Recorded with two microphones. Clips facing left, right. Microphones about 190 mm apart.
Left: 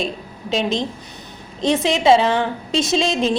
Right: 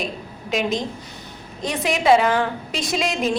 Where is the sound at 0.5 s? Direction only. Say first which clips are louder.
Left 2 dB; 25° left (ahead or behind).